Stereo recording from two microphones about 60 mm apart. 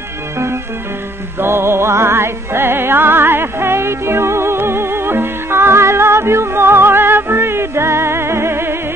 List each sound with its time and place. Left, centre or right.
1.4 s music: right